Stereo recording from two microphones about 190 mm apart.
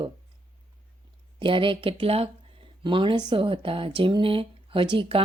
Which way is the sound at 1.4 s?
25° right (ahead or behind).